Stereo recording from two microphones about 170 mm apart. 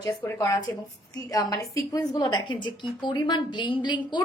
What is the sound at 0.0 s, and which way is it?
A woman's voice, 20° left (ahead or behind).